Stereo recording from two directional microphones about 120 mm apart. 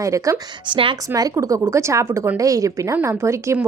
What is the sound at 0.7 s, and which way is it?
Speech, 45° right (ahead or behind).